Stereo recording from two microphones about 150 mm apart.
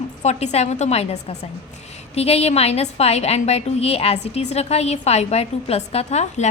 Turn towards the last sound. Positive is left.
turn(degrees=50)  # may be behind; listen again after turning